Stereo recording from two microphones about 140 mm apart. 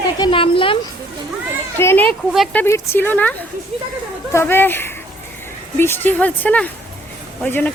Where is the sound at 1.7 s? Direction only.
15° left (ahead or behind).